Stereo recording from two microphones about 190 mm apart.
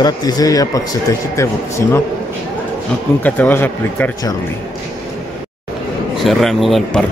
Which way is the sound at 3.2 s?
10° left (ahead or behind).